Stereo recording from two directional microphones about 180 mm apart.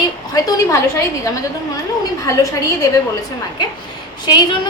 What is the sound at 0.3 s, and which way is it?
Speech, 20° left (ahead or behind).